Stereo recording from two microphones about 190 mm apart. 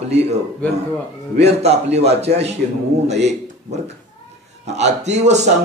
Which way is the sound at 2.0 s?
35° right (ahead or behind).